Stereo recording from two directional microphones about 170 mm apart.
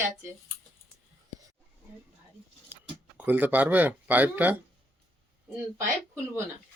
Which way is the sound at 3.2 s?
10° right (ahead or behind).